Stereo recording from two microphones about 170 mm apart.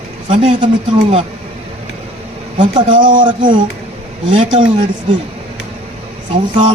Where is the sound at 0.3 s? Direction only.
30° right (ahead or behind).